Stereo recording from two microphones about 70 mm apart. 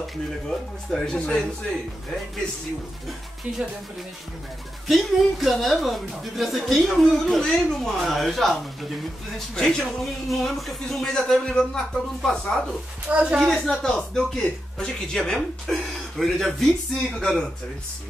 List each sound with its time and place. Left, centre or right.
0.8 s a man's voice: centre
4.8 s speech: centre
9.6 s a man's voice: centre
13.1 s a woman's voice: centre
13.5 s a man's voice: centre